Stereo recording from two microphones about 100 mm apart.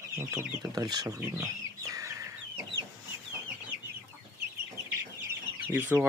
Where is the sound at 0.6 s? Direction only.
45° right (ahead or behind).